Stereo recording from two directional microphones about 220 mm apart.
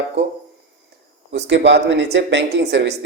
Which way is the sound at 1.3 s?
50° right (ahead or behind).